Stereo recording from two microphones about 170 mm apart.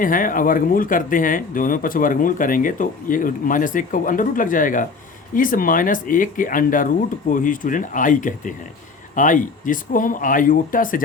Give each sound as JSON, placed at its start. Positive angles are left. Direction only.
{"t": 0.0, "sound": "speech", "side_deg": 55}